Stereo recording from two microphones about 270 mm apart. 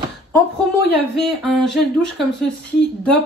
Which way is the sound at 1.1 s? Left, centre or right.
Centre.